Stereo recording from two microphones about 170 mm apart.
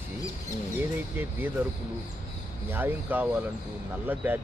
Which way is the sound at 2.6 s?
10° right (ahead or behind).